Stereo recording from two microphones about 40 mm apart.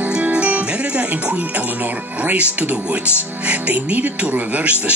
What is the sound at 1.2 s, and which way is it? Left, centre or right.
Speech, right.